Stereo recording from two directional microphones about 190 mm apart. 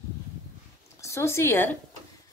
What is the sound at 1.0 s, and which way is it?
Speech, 15° left (ahead or behind).